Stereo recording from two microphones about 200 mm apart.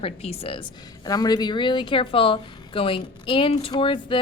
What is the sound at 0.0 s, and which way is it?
A woman's voice, 30° left (ahead or behind).